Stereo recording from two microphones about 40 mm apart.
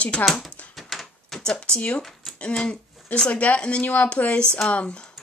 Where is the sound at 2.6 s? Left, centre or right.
Left.